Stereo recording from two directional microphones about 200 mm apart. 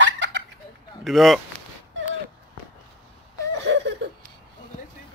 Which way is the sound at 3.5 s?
60° right (ahead or behind).